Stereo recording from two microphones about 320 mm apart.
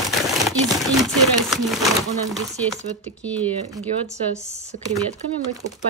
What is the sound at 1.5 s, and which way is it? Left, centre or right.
Speech, centre.